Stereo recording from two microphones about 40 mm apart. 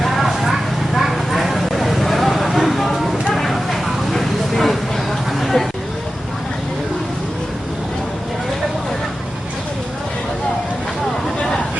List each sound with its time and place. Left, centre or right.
0.0 s clip-clop: centre
3.3 s vehicle: centre